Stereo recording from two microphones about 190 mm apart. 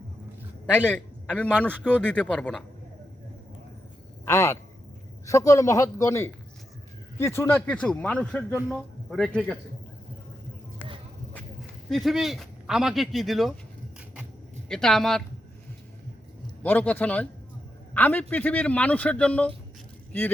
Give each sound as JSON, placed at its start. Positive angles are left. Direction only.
{"t": 0.8, "sound": "speech", "side_deg": 10}
{"t": 4.3, "sound": "speech", "side_deg": 15}
{"t": 11.9, "sound": "speech", "side_deg": 0}
{"t": 14.7, "sound": "speech", "side_deg": 5}
{"t": 16.6, "sound": "speech", "side_deg": 10}